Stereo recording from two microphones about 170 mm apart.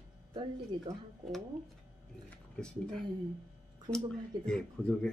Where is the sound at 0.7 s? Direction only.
30° right (ahead or behind).